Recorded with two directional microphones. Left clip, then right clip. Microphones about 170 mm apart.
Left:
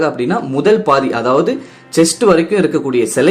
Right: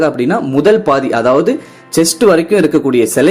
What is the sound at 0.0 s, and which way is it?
Speech, 20° right (ahead or behind).